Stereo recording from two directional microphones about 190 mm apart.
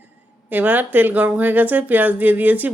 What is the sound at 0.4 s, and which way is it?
Speech, 10° right (ahead or behind).